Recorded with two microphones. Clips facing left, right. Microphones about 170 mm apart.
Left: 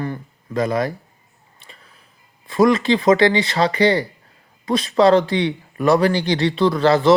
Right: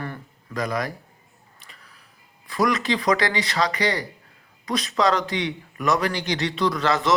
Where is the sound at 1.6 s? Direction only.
25° left (ahead or behind).